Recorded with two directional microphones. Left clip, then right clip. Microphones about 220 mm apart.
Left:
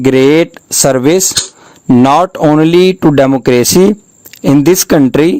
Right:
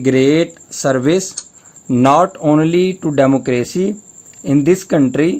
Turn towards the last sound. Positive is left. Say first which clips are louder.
# left 6 dB
turn(degrees=50)  # may be behind; listen again after turning